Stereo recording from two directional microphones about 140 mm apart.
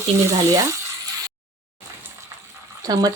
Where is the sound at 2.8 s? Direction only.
25° right (ahead or behind).